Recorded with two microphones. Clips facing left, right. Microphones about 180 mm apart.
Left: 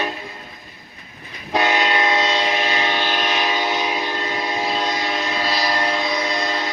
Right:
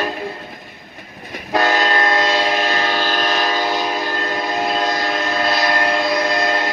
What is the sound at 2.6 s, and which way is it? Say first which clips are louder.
Train: right 2 dB; 40° right (ahead or behind).